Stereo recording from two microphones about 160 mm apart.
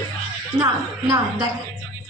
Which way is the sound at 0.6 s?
20° right (ahead or behind).